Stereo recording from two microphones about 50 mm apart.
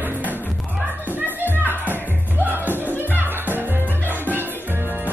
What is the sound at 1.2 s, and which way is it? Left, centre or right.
Music, right.